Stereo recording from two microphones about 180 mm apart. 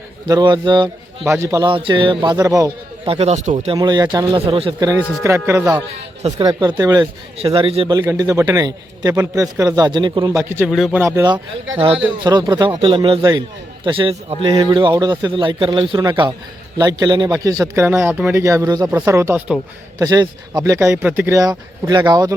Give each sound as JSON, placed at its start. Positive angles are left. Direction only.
{"t": 0.3, "sound": "a man's voice", "side_deg": -25}
{"t": 3.8, "sound": "a man's voice", "side_deg": -20}
{"t": 5.2, "sound": "a man's voice", "side_deg": -15}
{"t": 7.3, "sound": "speech", "side_deg": -30}
{"t": 7.9, "sound": "a man's voice", "side_deg": -20}
{"t": 10.7, "sound": "speech", "side_deg": 0}
{"t": 11.0, "sound": "a man's voice", "side_deg": -15}
{"t": 18.4, "sound": "a man's voice", "side_deg": -20}